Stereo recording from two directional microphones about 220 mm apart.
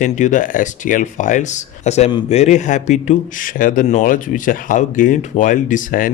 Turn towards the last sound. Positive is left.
turn(degrees=35)  # may be behind; listen again after turning